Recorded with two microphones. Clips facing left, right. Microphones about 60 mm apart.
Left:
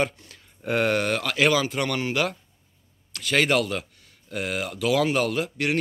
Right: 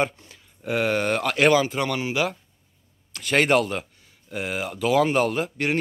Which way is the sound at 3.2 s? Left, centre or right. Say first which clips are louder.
Right 2 dB; right.